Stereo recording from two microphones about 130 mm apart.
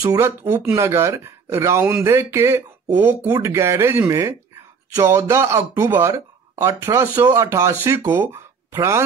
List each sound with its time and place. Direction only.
0.0 s speech: 25° right (ahead or behind)